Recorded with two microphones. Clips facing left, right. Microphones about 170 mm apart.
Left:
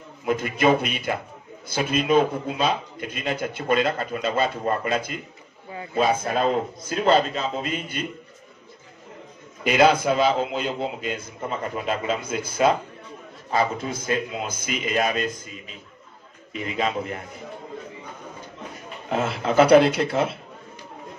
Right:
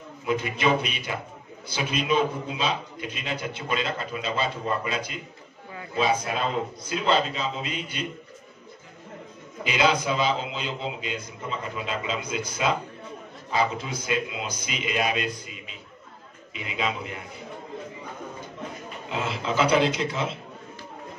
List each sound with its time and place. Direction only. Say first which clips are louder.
0.2 s a man's voice: left 4 dB; 50° left (ahead or behind)
9.7 s a man's voice: left 6 dB; 50° left (ahead or behind)
19.0 s a man's voice: left 5 dB; 50° left (ahead or behind)